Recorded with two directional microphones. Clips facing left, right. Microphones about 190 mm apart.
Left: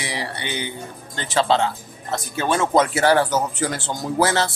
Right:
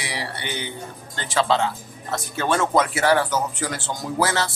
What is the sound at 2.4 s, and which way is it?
Speech, 15° left (ahead or behind).